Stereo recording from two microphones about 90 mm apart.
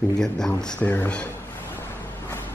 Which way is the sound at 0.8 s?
20° left (ahead or behind).